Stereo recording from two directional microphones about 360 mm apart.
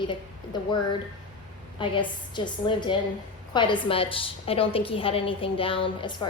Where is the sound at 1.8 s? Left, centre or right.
Centre.